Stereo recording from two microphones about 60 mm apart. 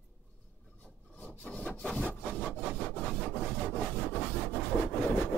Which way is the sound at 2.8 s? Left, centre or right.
Left.